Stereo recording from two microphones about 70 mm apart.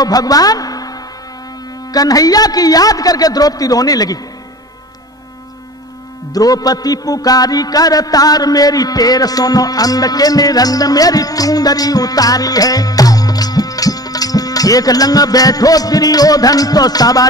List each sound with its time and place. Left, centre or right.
0.0 s speech: left
1.9 s music: left
6.3 s music: left